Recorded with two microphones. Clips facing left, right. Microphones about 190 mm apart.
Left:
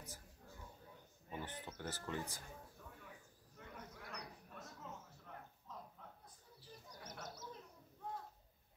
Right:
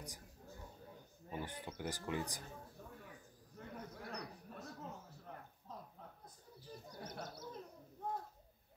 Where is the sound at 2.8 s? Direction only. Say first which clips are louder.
Right 3 dB; 35° right (ahead or behind).